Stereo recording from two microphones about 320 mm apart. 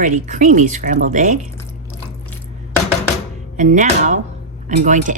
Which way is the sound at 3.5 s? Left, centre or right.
Right.